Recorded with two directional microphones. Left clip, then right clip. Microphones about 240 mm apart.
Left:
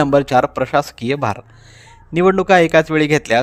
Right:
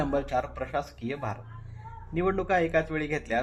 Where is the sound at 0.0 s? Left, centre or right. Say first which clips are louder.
Left 15 dB; left.